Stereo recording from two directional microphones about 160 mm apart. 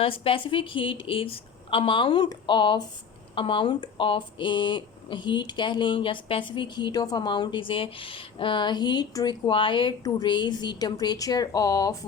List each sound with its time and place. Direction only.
0.0 s a woman's voice: 35° left (ahead or behind)